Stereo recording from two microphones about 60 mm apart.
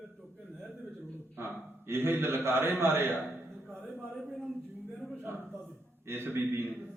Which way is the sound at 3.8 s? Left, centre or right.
Right.